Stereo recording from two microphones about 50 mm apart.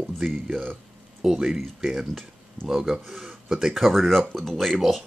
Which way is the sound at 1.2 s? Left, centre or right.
Centre.